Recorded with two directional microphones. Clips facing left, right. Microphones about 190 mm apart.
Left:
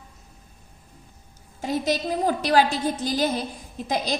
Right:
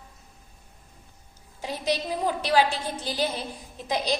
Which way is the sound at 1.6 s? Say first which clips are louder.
Left 4 dB; 45° left (ahead or behind).